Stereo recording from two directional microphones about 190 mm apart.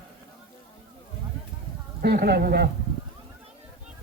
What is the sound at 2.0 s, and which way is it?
Speech, 55° right (ahead or behind).